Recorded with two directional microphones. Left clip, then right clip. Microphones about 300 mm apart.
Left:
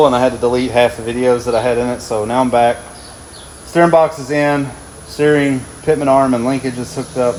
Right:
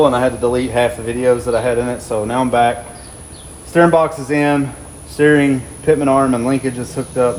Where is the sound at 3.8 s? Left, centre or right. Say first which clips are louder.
Left 1 dB; centre.